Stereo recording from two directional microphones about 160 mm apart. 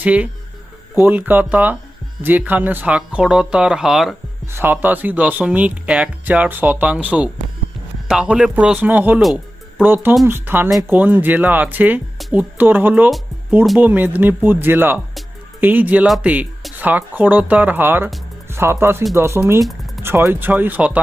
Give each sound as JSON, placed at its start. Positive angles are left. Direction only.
{"t": 0.0, "sound": "speech", "side_deg": -10}
{"t": 13.1, "sound": "speech", "side_deg": 0}
{"t": 13.7, "sound": "speech", "side_deg": -10}